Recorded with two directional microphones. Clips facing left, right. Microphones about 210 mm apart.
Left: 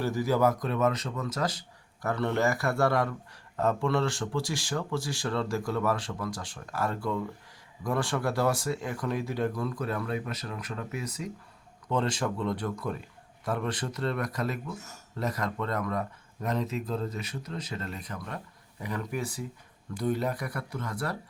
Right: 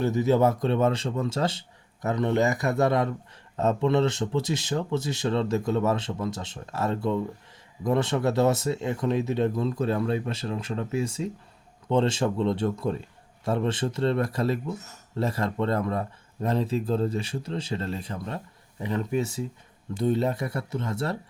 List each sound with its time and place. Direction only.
0.0 s speech: 20° right (ahead or behind)